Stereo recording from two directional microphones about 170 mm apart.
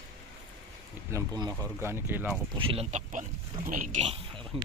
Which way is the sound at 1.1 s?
20° right (ahead or behind).